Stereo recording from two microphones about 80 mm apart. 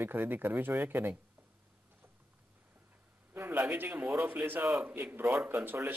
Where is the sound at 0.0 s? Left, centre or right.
Right.